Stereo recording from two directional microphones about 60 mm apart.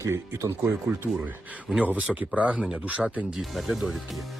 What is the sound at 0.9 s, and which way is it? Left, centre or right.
Speech, right.